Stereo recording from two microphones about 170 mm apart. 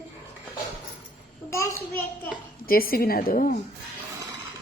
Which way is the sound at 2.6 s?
60° left (ahead or behind).